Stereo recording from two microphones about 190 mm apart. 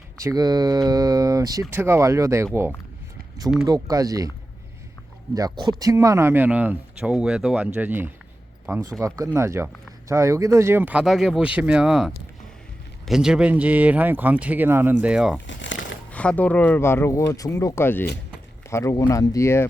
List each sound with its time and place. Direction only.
0.3 s speech: 20° right (ahead or behind)
5.3 s speech: 20° right (ahead or behind); by 15.4 s 5° right (ahead or behind)
15.4 s crumpling: 75° left (ahead or behind)
16.1 s speech: 5° left (ahead or behind)